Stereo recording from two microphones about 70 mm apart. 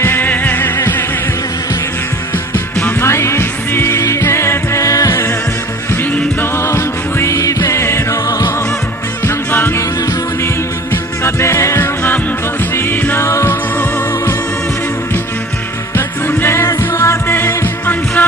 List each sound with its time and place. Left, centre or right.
0.0 s music: left
3.0 s music: left
5.9 s music: left
6.6 s music: left
9.2 s music: left
10.9 s music: left
12.7 s music: left
13.2 s music: left
16.0 s music: left
18.2 s music: left